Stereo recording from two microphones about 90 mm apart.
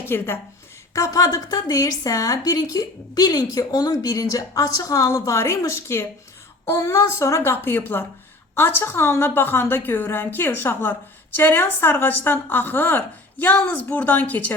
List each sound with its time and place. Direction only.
0.1 s a woman's voice: 30° left (ahead or behind)